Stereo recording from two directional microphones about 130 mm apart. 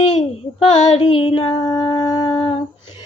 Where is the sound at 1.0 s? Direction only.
45° left (ahead or behind).